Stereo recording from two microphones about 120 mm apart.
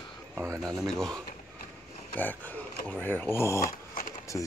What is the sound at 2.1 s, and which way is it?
Speech, 15° left (ahead or behind).